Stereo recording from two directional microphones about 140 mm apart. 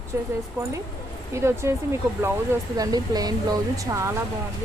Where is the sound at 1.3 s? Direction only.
20° right (ahead or behind).